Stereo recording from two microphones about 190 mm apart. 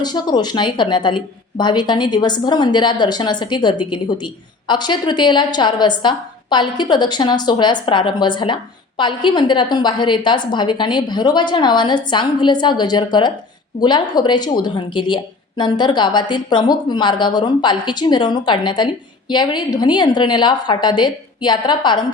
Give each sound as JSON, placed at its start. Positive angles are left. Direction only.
{"t": 0.0, "sound": "speech", "side_deg": 20}